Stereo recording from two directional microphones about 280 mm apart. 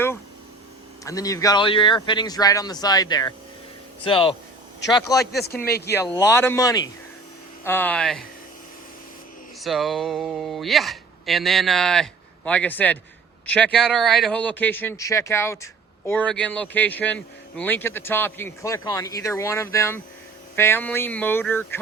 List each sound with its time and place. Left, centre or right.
1.0 s speech: centre
5.2 s speech: left
5.9 s speech: centre
9.6 s speech: centre